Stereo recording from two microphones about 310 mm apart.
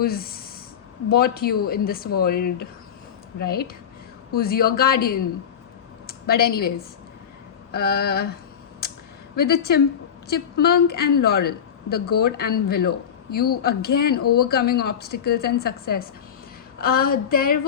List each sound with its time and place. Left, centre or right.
0.0 s a woman's voice: left
9.3 s a woman's voice: left